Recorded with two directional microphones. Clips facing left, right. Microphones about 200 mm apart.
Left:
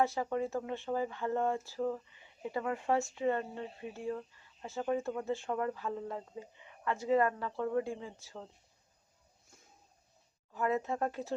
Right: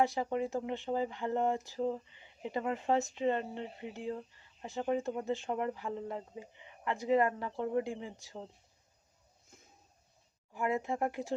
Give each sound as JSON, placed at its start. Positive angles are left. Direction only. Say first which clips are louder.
{"t": 0.0, "sound": "speech", "louder": "right 1 dB", "side_deg": -15}
{"t": 9.5, "sound": "a sound", "louder": "right 3 dB", "side_deg": -20}
{"t": 10.5, "sound": "speech", "louder": "left 1 dB", "side_deg": -15}